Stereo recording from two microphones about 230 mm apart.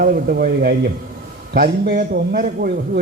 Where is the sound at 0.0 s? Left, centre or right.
Right.